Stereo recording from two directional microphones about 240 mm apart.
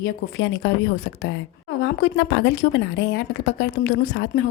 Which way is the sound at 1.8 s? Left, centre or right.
Left.